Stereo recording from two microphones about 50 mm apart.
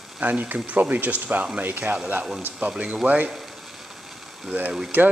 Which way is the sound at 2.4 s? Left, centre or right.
Right.